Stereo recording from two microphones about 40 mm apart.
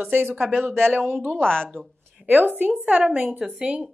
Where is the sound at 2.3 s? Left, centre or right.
Right.